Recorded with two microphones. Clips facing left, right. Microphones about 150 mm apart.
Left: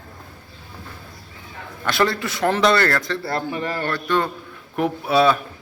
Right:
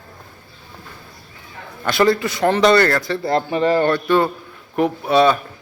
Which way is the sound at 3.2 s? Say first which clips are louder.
Right 7 dB; 20° right (ahead or behind).